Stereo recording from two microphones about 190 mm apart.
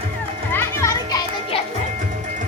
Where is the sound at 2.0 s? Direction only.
40° right (ahead or behind).